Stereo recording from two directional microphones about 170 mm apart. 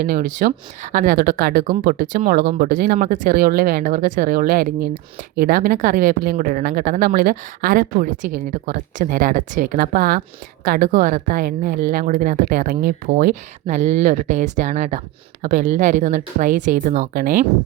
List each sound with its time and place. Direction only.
0.0 s a woman's voice: 55° right (ahead or behind)